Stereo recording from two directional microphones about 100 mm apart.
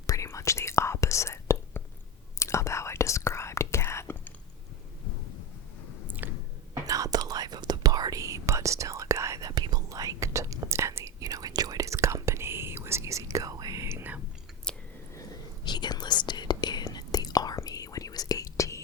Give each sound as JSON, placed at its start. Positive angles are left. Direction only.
{"t": 0.1, "sound": "whispering", "side_deg": 30}
{"t": 6.1, "sound": "chewing", "side_deg": -20}
{"t": 6.8, "sound": "whispering", "side_deg": -35}
{"t": 9.5, "sound": "whispering", "side_deg": -45}
{"t": 15.6, "sound": "whispering", "side_deg": 45}